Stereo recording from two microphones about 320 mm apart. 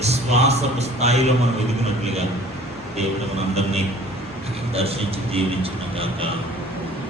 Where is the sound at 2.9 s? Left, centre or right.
Centre.